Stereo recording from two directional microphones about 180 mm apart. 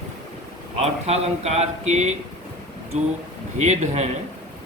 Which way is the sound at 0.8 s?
35° right (ahead or behind).